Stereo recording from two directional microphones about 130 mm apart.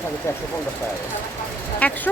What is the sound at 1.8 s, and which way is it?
Speech, 10° left (ahead or behind).